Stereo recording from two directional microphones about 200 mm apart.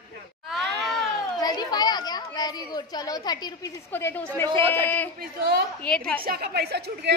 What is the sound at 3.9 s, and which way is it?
A woman's voice, 10° left (ahead or behind).